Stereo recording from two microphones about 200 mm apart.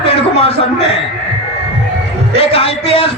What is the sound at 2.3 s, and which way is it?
Speech, 30° left (ahead or behind).